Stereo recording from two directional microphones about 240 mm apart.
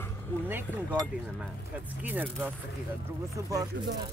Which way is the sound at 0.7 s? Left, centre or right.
Centre.